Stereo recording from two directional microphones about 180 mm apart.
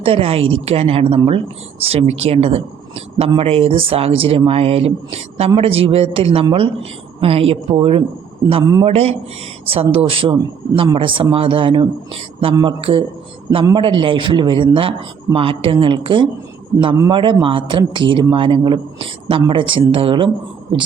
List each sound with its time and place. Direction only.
0.0 s a man's voice: 30° right (ahead or behind)